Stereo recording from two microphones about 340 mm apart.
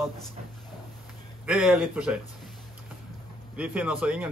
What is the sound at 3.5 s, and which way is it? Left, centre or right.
Speech, centre.